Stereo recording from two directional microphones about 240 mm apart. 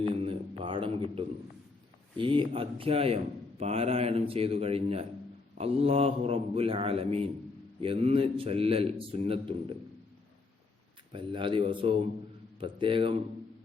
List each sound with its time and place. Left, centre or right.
0.0 s a sound: right
2.1 s a man's voice: right
11.1 s a man's voice: right